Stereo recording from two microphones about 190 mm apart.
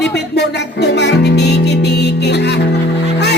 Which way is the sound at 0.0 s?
60° left (ahead or behind).